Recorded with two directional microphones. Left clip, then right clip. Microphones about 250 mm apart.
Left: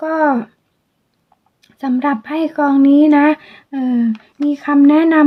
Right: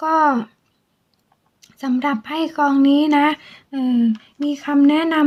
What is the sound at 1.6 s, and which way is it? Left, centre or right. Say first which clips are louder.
Speech: left 4 dB; right.